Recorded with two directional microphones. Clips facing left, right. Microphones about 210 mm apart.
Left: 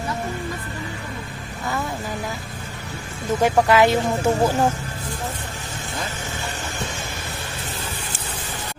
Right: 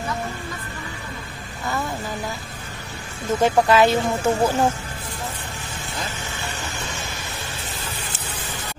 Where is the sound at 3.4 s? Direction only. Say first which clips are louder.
Even; 15° left (ahead or behind).